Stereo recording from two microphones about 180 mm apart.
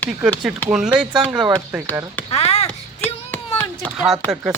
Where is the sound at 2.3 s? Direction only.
35° left (ahead or behind).